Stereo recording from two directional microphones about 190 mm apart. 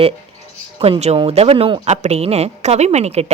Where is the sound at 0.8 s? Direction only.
35° right (ahead or behind).